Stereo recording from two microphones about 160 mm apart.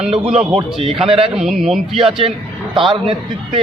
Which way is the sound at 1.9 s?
35° right (ahead or behind).